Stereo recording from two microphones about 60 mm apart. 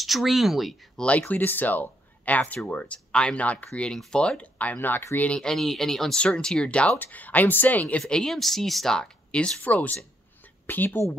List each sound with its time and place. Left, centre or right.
0.0 s speech: centre
0.9 s speech: left
4.7 s speech: left
5.4 s speech: centre; by 8.0 s left
8.1 s speech: centre
9.6 s speech: left